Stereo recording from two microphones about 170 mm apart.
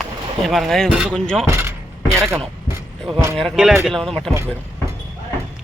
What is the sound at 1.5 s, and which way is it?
Speech, 15° right (ahead or behind).